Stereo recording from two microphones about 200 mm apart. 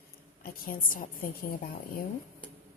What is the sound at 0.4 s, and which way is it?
Speech, 45° left (ahead or behind).